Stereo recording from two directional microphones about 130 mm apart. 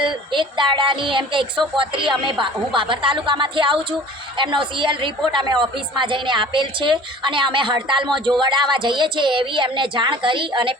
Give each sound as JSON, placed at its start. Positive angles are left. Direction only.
{"t": 0.0, "sound": "a woman's voice", "side_deg": -40}